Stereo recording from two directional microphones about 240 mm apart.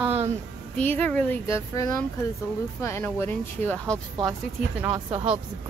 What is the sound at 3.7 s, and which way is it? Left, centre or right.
Speech, centre.